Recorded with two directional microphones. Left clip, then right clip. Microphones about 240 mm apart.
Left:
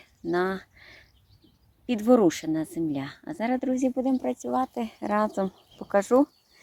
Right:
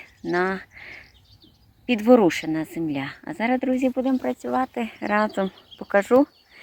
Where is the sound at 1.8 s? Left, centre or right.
Centre.